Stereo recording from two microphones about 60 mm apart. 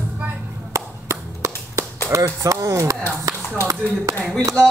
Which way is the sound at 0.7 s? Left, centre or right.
Right.